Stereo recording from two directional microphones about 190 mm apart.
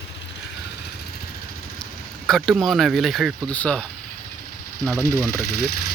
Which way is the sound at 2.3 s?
Centre (ahead or behind).